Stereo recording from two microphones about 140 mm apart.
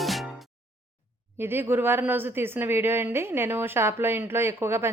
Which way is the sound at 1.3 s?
15° right (ahead or behind).